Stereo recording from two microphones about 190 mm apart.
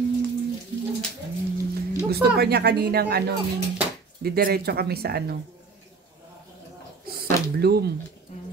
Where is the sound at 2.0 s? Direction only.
55° right (ahead or behind).